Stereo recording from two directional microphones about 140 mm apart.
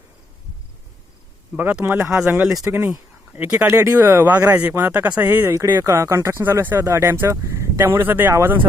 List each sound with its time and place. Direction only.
1.5 s speech: 15° right (ahead or behind)
2.6 s speech: 15° right (ahead or behind)